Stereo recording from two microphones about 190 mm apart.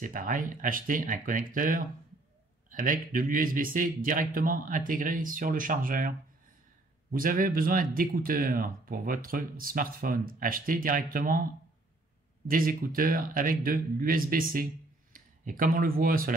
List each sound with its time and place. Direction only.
0.0 s speech: 45° right (ahead or behind)
12.4 s speech: 50° right (ahead or behind)